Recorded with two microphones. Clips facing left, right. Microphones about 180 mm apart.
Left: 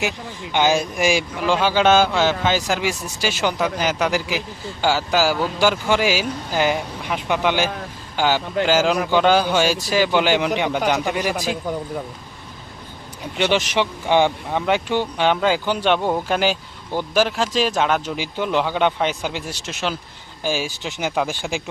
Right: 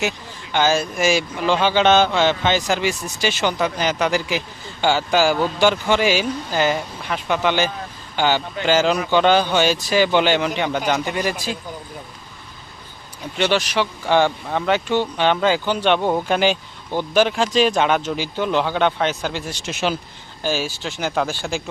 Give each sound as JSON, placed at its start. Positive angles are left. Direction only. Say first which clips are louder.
{"t": 0.5, "sound": "a man's voice", "louder": "even", "side_deg": 15}
{"t": 13.3, "sound": "speech", "louder": "even", "side_deg": 15}
{"t": 18.0, "sound": "speech", "louder": "right 2 dB", "side_deg": 10}
{"t": 19.6, "sound": "speech", "louder": "right 4 dB", "side_deg": -5}
{"t": 20.4, "sound": "speech", "louder": "right 1 dB", "side_deg": 10}